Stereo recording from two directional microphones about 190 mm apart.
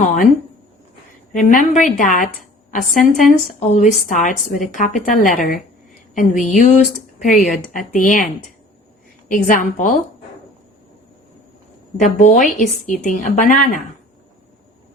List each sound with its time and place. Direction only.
1.4 s a woman's voice: 45° left (ahead or behind)
9.3 s a woman's voice: 45° left (ahead or behind)
11.9 s a woman's voice: 40° left (ahead or behind)